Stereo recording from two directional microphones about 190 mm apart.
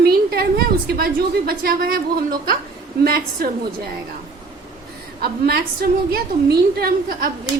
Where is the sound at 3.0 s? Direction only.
50° right (ahead or behind).